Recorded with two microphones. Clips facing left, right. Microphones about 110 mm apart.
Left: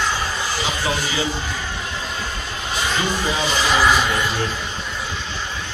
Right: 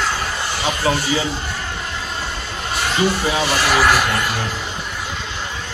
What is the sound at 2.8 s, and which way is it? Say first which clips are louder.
Speech: right 4 dB; 5° right (ahead or behind).